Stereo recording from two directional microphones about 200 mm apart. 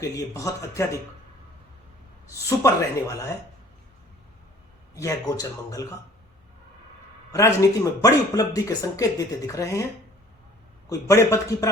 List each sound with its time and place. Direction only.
0.0 s speech: 15° left (ahead or behind)
2.3 s speech: 15° left (ahead or behind)
4.9 s speech: 15° left (ahead or behind)
7.3 s speech: 15° left (ahead or behind)
10.8 s speech: 15° left (ahead or behind)